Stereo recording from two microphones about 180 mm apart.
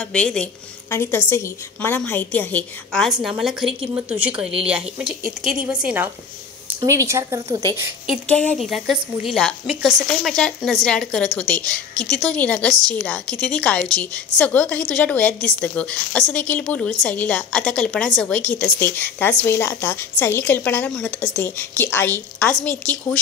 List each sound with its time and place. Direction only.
0.0 s a woman's voice: 5° left (ahead or behind)
6.8 s a woman's voice: 15° right (ahead or behind)
8.3 s a woman's voice: 5° left (ahead or behind)